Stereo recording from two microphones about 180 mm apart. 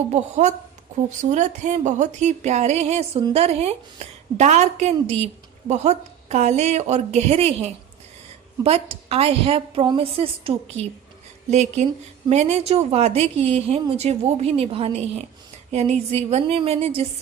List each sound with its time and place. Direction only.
0.1 s a woman's voice: 40° right (ahead or behind)